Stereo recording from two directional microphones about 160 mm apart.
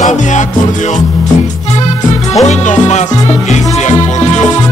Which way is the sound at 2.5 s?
45° left (ahead or behind).